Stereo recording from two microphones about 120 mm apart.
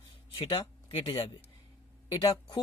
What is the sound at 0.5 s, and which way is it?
Speech, 40° left (ahead or behind).